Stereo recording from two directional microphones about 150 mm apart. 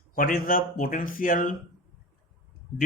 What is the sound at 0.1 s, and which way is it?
Speech, 70° left (ahead or behind).